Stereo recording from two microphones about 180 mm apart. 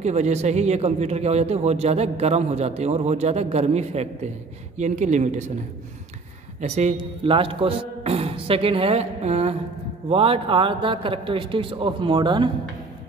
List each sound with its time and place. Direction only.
0.0 s a man's voice: 40° right (ahead or behind)
6.6 s a man's voice: 40° right (ahead or behind)